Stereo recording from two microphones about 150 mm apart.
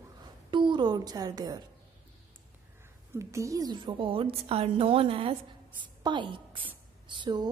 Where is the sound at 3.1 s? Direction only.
20° right (ahead or behind).